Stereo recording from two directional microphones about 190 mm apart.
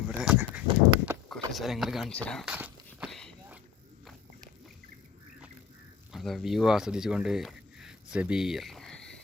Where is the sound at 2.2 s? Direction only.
Centre (ahead or behind).